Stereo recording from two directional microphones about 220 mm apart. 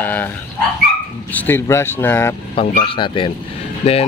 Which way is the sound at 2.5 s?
25° left (ahead or behind).